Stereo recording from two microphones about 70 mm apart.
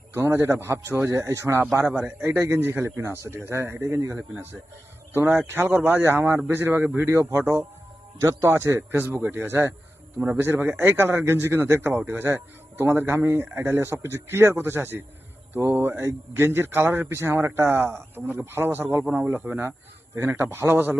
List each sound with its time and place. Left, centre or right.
0.1 s a man's voice: right
5.5 s a man's voice: right
8.2 s speech: right
8.4 s a man's voice: right
20.1 s a man's voice: right